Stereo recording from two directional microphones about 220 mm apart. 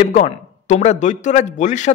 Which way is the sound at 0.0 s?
30° left (ahead or behind).